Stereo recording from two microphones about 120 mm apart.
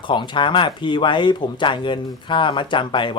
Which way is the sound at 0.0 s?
40° left (ahead or behind).